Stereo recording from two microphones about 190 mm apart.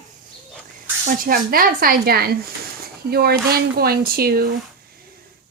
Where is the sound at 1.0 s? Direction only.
50° right (ahead or behind).